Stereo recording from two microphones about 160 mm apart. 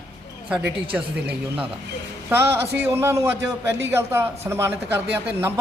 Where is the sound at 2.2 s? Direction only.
15° right (ahead or behind).